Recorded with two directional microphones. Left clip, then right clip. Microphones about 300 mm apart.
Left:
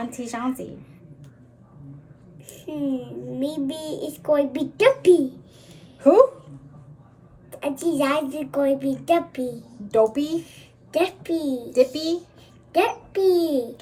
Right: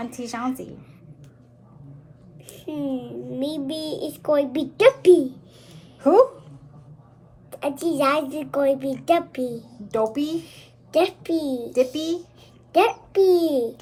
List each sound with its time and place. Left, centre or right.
0.0 s a child's voice: centre
2.5 s a child's voice: centre
7.5 s a child's voice: centre
9.9 s a child's voice: centre